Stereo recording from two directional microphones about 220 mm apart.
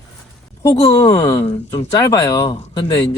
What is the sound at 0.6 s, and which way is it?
Speech, 15° left (ahead or behind).